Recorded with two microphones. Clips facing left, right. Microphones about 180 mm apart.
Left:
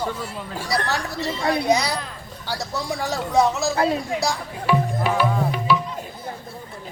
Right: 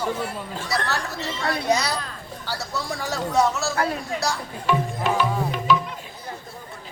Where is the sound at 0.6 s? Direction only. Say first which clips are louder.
Left 3 dB; 15° left (ahead or behind).